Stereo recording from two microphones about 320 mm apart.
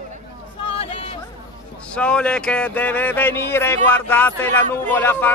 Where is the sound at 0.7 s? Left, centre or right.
Centre.